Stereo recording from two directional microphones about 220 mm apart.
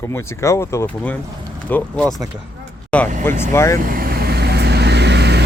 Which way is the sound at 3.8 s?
40° right (ahead or behind).